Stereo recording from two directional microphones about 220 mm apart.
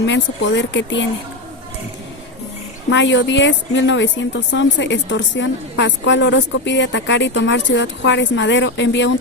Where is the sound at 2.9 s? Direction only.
55° left (ahead or behind).